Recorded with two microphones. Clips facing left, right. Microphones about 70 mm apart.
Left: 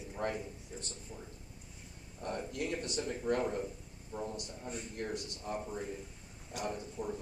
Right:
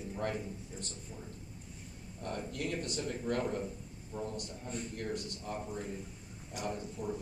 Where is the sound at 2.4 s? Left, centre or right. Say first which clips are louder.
Even; centre.